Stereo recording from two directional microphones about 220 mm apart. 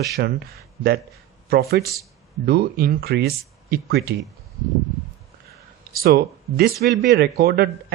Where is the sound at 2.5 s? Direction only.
45° right (ahead or behind).